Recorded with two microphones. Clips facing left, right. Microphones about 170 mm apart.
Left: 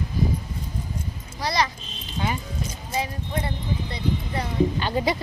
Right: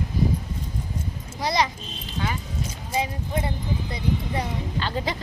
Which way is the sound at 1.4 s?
20° right (ahead or behind).